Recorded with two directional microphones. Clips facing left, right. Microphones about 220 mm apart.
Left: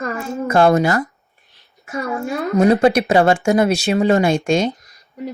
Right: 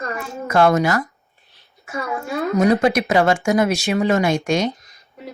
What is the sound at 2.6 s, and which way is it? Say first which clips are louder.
Speech: left 3 dB; 30° left (ahead or behind).